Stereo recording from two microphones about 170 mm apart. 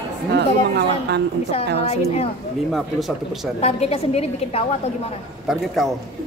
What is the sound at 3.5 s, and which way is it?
A woman's voice, 35° left (ahead or behind).